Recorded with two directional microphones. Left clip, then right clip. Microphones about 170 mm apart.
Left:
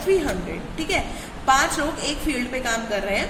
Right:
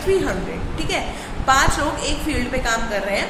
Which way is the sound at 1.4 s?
25° left (ahead or behind).